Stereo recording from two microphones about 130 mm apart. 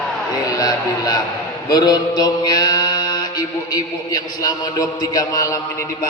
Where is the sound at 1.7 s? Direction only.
30° left (ahead or behind).